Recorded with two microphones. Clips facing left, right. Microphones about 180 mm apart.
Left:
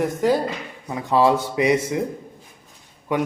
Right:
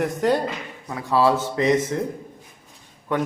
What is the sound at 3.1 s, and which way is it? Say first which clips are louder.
Speech: left 1 dB; 10° left (ahead or behind).